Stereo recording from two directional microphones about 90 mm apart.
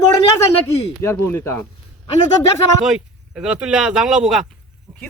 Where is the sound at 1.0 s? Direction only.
25° left (ahead or behind).